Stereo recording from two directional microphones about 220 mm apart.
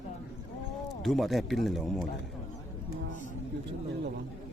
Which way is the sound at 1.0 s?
Centre (ahead or behind).